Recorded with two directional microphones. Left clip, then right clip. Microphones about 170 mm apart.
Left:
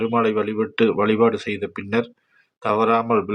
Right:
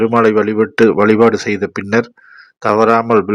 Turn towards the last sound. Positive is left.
turn(degrees=-30)  # may be behind; listen again after turning